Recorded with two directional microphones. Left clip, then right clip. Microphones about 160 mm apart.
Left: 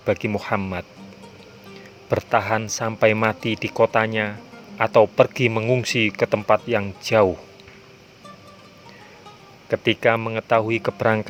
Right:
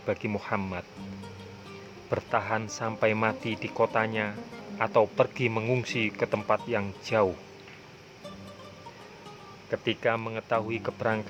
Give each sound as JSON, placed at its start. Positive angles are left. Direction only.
{"t": 0.0, "sound": "speech", "side_deg": 25}
{"t": 2.0, "sound": "speech", "side_deg": 25}
{"t": 9.6, "sound": "speech", "side_deg": 35}